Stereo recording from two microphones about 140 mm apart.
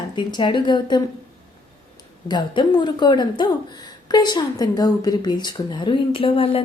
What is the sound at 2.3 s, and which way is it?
A woman's voice, 30° left (ahead or behind).